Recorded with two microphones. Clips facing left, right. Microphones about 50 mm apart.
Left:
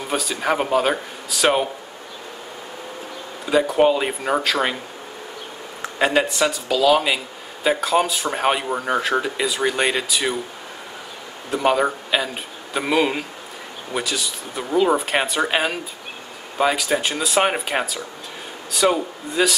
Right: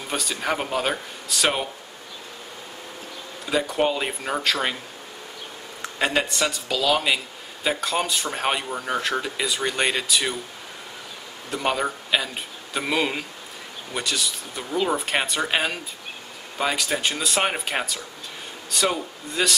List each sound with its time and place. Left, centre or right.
0.1 s speech: centre
3.4 s speech: centre
5.8 s speech: centre
11.5 s speech: centre